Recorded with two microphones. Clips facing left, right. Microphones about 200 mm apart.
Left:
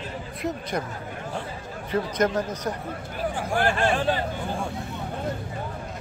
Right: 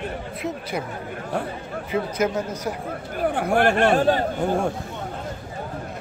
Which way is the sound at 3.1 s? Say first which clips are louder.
Right 6 dB; 60° right (ahead or behind).